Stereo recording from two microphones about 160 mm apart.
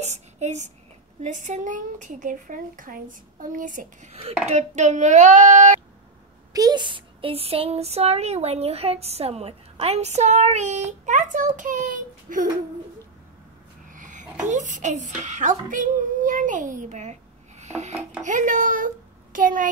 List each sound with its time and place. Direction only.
0.0 s a child's voice: 45° right (ahead or behind)
6.5 s speech: 25° right (ahead or behind); by 12.4 s 55° right (ahead or behind)
13.8 s babbling: 55° right (ahead or behind)
14.4 s a child's voice: 50° right (ahead or behind)